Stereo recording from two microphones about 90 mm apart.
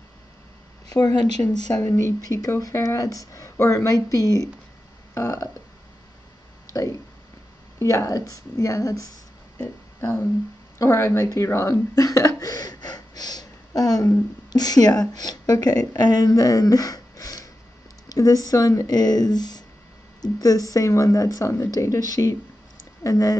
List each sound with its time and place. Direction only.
0.8 s speech: 45° left (ahead or behind)
1.8 s speech: 30° left (ahead or behind)
5.1 s a sound: 35° left (ahead or behind)
6.7 s speech: 35° left (ahead or behind)
9.6 s a woman's voice: 25° left (ahead or behind)